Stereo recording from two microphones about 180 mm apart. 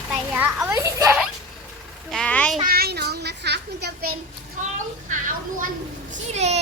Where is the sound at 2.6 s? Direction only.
60° right (ahead or behind).